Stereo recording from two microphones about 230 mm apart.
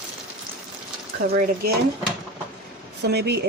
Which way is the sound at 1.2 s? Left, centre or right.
Right.